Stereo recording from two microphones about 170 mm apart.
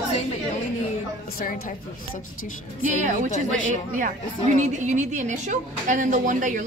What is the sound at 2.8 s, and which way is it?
A woman's voice, 50° right (ahead or behind).